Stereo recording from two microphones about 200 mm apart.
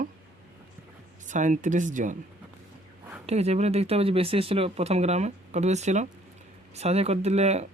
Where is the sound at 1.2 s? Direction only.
40° right (ahead or behind).